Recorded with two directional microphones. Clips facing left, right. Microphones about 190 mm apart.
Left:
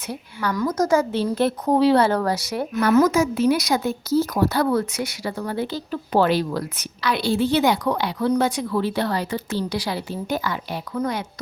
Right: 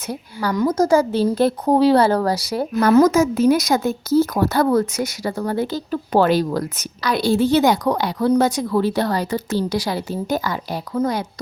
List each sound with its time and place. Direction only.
0.1 s a woman's voice: 35° right (ahead or behind)
0.5 s a woman's voice: 25° right (ahead or behind)